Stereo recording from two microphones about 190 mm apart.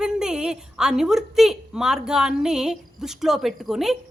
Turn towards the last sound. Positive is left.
turn(degrees=0)  # may be behind; listen again after turning